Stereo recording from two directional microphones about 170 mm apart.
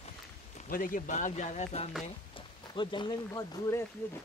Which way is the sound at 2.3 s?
30° left (ahead or behind).